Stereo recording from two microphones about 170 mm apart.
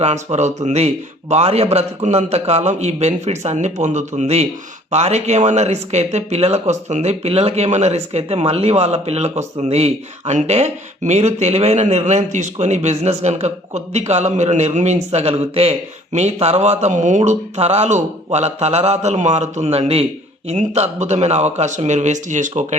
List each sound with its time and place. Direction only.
0.0 s a man's voice: 40° right (ahead or behind)